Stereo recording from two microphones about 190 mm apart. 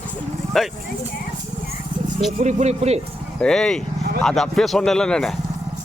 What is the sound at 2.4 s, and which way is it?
Speech, 35° right (ahead or behind).